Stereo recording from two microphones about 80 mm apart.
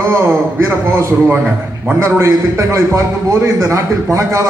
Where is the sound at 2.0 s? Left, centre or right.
Right.